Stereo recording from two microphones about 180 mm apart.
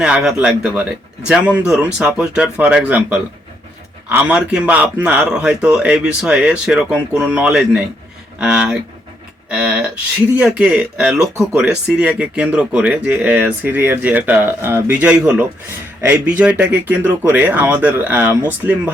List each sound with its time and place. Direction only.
0.0 s a man's voice: 5° right (ahead or behind)